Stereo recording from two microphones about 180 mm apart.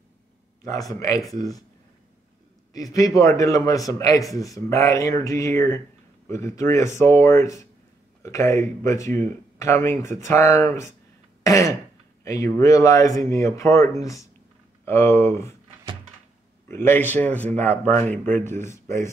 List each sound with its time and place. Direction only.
0.7 s a man's voice: 20° left (ahead or behind)
2.7 s a man's voice: 20° left (ahead or behind)
16.6 s speech: 15° left (ahead or behind)